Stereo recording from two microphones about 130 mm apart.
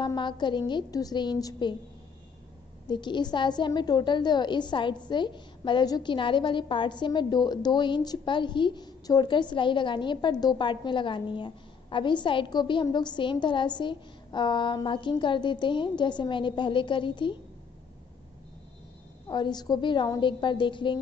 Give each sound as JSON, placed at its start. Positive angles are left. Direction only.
{"t": 0.0, "sound": "a woman's voice", "side_deg": 35}
{"t": 2.9, "sound": "a woman's voice", "side_deg": 35}
{"t": 19.2, "sound": "a woman's voice", "side_deg": 35}